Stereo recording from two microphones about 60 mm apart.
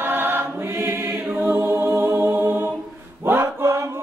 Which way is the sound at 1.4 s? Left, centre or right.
Right.